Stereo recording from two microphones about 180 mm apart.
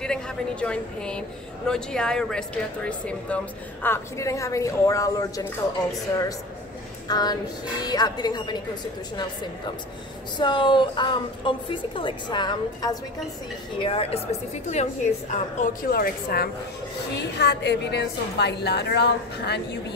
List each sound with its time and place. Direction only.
0.0 s a woman's voice: 5° left (ahead or behind)
7.1 s a woman's voice: 20° left (ahead or behind)
10.4 s a woman's voice: 25° left (ahead or behind); by 16.4 s 55° left (ahead or behind)
17.1 s a woman's voice: 70° left (ahead or behind)